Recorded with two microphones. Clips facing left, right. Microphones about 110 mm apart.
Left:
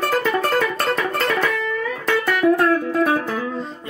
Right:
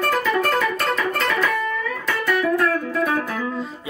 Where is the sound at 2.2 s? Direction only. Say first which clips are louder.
Left 3 dB; 50° left (ahead or behind).